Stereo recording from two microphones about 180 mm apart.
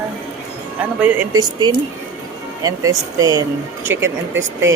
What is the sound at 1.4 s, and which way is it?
Speech, 25° right (ahead or behind).